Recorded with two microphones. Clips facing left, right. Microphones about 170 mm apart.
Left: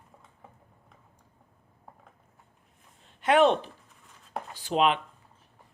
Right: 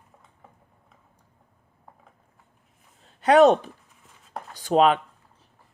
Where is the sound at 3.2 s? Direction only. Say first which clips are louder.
Right 6 dB; 40° right (ahead or behind).